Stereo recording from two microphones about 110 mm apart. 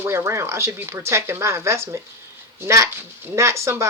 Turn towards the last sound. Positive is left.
turn(degrees=-25)  # may be behind; listen again after turning